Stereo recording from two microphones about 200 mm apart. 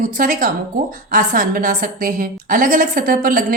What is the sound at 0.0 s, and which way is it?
A woman's voice, 40° right (ahead or behind).